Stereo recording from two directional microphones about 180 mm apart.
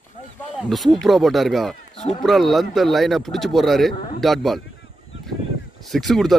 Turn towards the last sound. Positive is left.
turn(degrees=0)  # may be behind; listen again after turning